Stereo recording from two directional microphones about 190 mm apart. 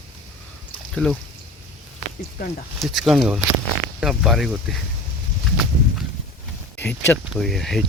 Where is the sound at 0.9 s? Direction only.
Centre (ahead or behind).